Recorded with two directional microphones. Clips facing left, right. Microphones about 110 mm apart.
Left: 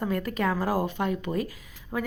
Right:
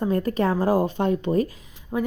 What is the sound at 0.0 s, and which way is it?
Speech, 30° right (ahead or behind).